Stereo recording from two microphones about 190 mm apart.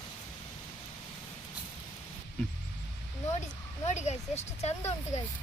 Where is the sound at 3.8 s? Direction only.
35° left (ahead or behind).